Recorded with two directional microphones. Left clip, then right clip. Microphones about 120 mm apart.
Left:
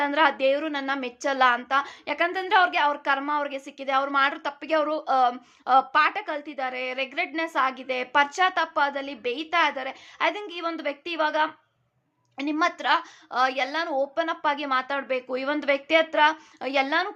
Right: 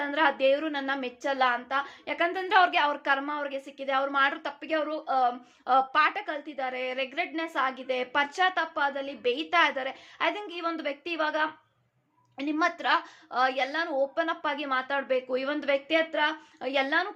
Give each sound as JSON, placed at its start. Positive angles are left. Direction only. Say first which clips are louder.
{"t": 0.0, "sound": "a woman's voice", "louder": "left 3 dB", "side_deg": 30}
{"t": 2.0, "sound": "a woman's voice", "louder": "left 3 dB", "side_deg": 15}
{"t": 2.5, "sound": "a woman's voice", "louder": "left 2 dB", "side_deg": 5}
{"t": 3.3, "sound": "a woman's voice", "louder": "left 5 dB", "side_deg": 30}
{"t": 4.7, "sound": "speech", "louder": "left 5 dB", "side_deg": 45}
{"t": 5.6, "sound": "a woman's voice", "louder": "left 3 dB", "side_deg": 20}
{"t": 9.2, "sound": "a woman's voice", "louder": "even", "side_deg": 10}